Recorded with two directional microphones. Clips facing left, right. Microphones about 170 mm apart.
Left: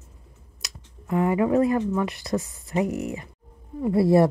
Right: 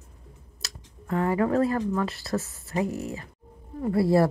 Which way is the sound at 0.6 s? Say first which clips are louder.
Left 1 dB; 15° left (ahead or behind).